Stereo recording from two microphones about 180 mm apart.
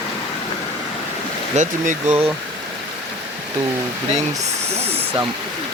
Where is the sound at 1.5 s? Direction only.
40° right (ahead or behind).